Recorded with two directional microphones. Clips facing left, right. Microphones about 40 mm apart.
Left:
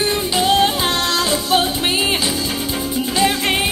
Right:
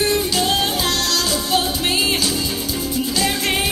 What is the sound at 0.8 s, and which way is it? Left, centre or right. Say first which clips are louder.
Music: left 2 dB; left.